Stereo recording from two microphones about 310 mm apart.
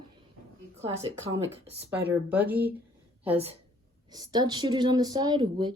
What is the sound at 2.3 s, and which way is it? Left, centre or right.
Speech, centre.